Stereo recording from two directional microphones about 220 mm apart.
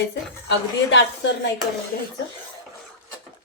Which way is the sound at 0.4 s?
55° left (ahead or behind).